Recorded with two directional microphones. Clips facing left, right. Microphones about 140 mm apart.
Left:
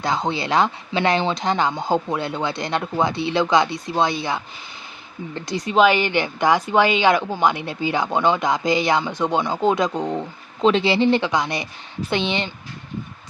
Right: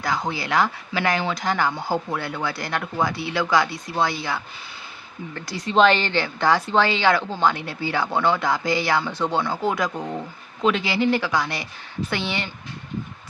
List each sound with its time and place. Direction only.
0.0 s speech: 25° left (ahead or behind)
5.7 s a woman's voice: 10° left (ahead or behind)